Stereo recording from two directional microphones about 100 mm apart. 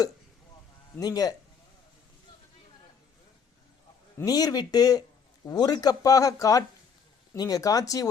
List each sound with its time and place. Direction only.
0.9 s speech: 40° left (ahead or behind)
4.3 s speech: 40° left (ahead or behind)